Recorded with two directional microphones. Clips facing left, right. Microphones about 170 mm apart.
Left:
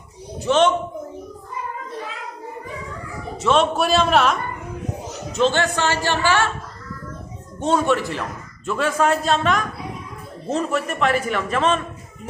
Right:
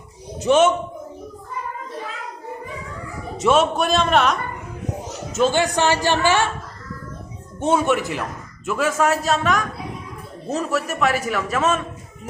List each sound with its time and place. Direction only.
0.3 s a man's voice: 15° right (ahead or behind)
3.5 s a man's voice: centre (ahead or behind)
5.3 s a woman's voice: 10° right (ahead or behind)
7.6 s a woman's voice: 15° right (ahead or behind)